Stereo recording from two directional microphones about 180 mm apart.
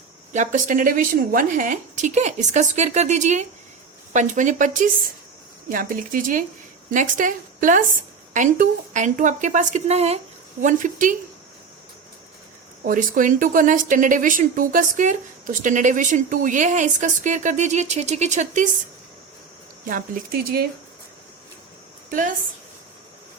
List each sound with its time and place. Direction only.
0.3 s a woman's voice: 45° right (ahead or behind)
12.8 s speech: 50° right (ahead or behind)
19.8 s speech: 50° right (ahead or behind)